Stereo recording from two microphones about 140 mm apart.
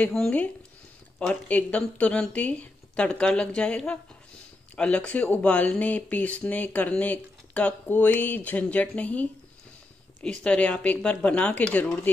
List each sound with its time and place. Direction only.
0.0 s speech: 5° left (ahead or behind)
10.4 s speech: 5° left (ahead or behind)